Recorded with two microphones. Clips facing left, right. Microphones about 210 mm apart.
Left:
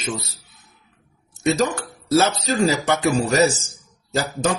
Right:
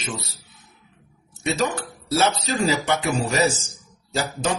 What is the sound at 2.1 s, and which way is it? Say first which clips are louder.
A man's voice: left 3 dB; 45° left (ahead or behind).